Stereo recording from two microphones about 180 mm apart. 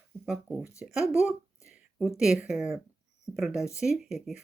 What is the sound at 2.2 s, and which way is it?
Speech, 5° right (ahead or behind).